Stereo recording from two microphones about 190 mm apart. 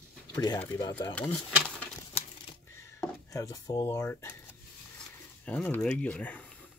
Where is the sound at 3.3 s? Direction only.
15° left (ahead or behind).